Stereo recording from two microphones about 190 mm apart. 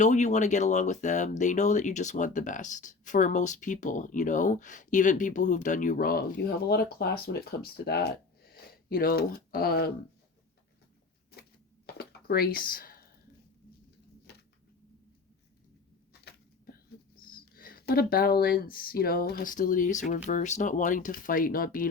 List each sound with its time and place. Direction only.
0.0 s speech: 40° left (ahead or behind); by 9.9 s 55° left (ahead or behind)
11.9 s a sound: 55° left (ahead or behind)
17.2 s speech: 50° left (ahead or behind)